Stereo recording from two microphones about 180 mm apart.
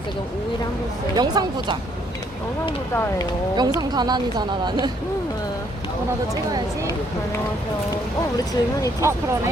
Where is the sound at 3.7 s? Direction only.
25° right (ahead or behind).